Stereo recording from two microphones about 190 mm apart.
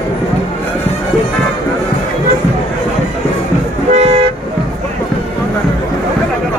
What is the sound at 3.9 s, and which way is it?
Toot, 35° right (ahead or behind).